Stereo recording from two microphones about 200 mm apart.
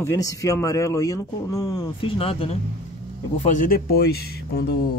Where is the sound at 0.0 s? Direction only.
15° left (ahead or behind).